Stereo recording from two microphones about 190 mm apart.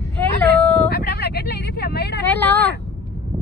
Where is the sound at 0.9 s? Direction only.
60° left (ahead or behind).